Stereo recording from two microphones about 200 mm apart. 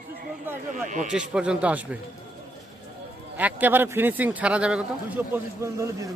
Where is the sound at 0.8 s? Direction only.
40° right (ahead or behind).